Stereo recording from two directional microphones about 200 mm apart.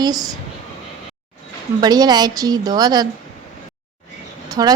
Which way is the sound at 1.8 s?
20° right (ahead or behind).